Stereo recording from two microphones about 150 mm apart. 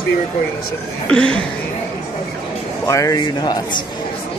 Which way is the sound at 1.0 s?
5° left (ahead or behind).